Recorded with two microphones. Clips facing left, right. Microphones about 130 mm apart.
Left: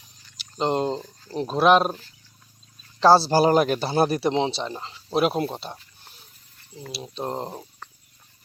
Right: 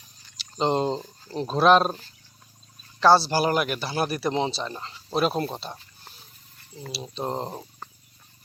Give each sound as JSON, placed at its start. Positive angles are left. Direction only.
{"t": 0.5, "sound": "speech", "side_deg": 5}
{"t": 0.9, "sound": "a sound", "side_deg": -20}
{"t": 1.3, "sound": "speech", "side_deg": 15}
{"t": 3.0, "sound": "speech", "side_deg": 35}